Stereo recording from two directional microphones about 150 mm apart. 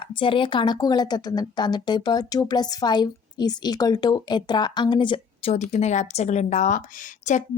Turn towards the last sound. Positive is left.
turn(degrees=55)  # may be behind; listen again after turning